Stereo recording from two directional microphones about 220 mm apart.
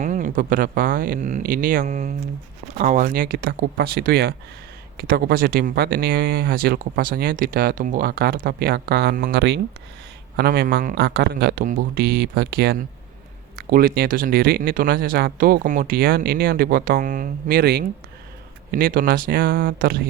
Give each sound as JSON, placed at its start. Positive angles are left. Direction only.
{"t": 0.0, "sound": "speech", "side_deg": -35}